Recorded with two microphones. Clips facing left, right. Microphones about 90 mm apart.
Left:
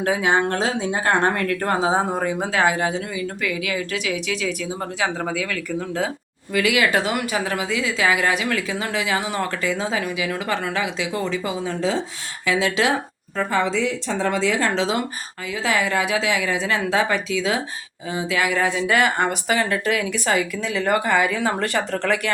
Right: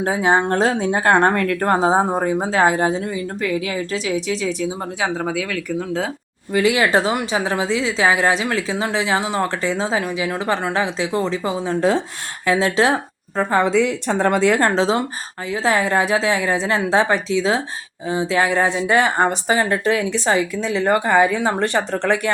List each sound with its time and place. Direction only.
0.0 s speech: 30° right (ahead or behind)
0.6 s speech: 45° right (ahead or behind)
5.3 s speech: 15° right (ahead or behind)
6.5 s speech: 30° right (ahead or behind)
11.8 s speech: 55° right (ahead or behind)
12.5 s speech: 40° right (ahead or behind)
13.6 s speech: 55° right (ahead or behind)
14.8 s speech: 35° right (ahead or behind)